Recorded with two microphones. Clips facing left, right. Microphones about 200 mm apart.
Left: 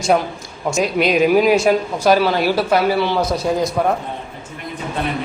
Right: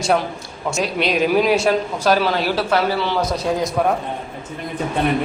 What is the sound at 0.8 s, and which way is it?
A woman's voice, 5° left (ahead or behind).